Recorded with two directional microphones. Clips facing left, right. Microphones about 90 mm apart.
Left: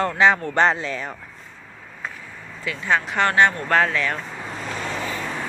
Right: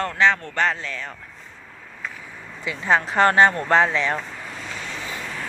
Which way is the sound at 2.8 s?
30° right (ahead or behind).